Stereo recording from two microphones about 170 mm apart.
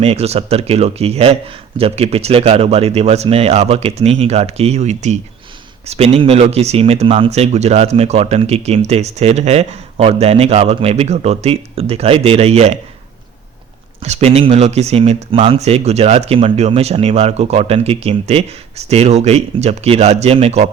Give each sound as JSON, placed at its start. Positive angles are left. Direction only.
{"t": 0.0, "sound": "speech", "side_deg": -35}
{"t": 14.0, "sound": "speech", "side_deg": -40}